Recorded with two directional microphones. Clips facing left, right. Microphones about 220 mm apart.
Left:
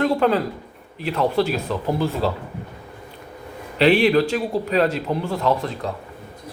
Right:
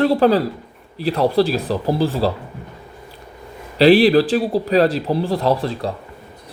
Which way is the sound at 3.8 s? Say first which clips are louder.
Right 4 dB; 35° right (ahead or behind).